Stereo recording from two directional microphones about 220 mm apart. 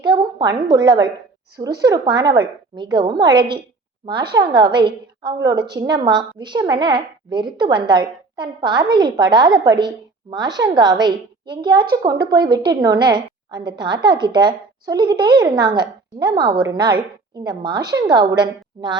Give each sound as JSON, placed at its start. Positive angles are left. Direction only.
{"t": 0.0, "sound": "a woman's voice", "side_deg": -20}